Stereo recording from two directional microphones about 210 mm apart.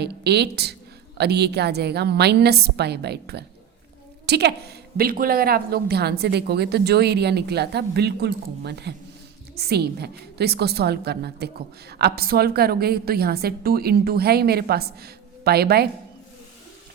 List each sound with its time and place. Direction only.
0.0 s a woman's voice: 50° right (ahead or behind)